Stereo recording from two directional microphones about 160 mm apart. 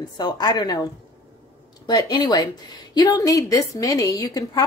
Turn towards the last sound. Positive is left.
turn(degrees=20)  # may be behind; listen again after turning